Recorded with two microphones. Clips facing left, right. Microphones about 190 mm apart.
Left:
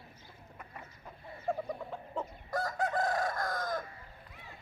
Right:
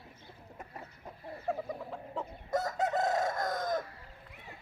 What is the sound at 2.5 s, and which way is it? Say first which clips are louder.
Chicken: right 2 dB; 20° right (ahead or behind).